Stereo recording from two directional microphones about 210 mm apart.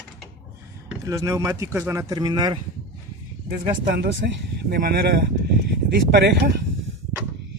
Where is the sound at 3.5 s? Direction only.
55° right (ahead or behind).